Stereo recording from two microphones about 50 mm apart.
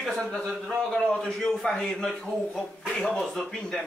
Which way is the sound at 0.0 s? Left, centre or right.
Centre.